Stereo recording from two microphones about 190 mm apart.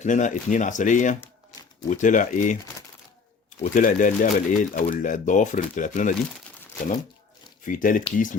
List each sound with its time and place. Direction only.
0.0 s speech: 40° left (ahead or behind)
1.2 s crumpling: 20° left (ahead or behind)
1.9 s speech: 40° left (ahead or behind)
3.6 s speech: 45° left (ahead or behind)
7.6 s speech: 45° left (ahead or behind)